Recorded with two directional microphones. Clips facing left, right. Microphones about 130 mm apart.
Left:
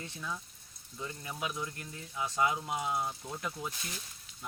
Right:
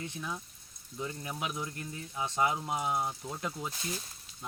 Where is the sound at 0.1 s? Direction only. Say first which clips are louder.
Right 1 dB; 15° right (ahead or behind).